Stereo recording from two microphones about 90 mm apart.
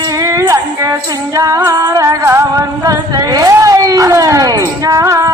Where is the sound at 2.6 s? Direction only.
45° right (ahead or behind).